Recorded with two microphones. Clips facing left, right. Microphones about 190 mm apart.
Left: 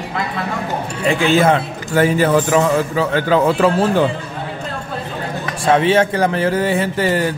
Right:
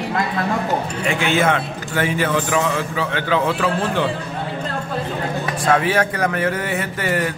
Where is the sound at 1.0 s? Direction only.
35° left (ahead or behind).